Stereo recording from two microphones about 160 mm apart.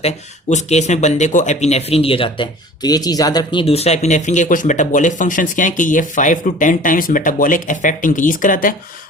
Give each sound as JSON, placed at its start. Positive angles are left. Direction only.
{"t": 0.0, "sound": "speech", "side_deg": 45}